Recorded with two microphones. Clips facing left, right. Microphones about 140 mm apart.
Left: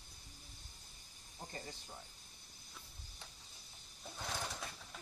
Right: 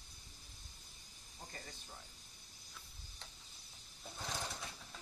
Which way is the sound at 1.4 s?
15° left (ahead or behind).